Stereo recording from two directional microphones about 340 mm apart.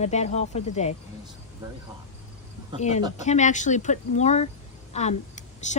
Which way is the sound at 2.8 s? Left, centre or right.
Centre.